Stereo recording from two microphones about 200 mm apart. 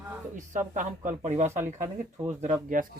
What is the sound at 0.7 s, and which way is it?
Speech, 40° right (ahead or behind).